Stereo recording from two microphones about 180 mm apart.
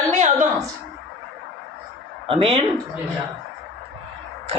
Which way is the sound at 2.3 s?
30° right (ahead or behind).